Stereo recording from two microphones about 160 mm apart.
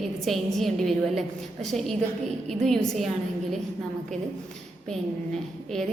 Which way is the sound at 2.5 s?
Centre (ahead or behind).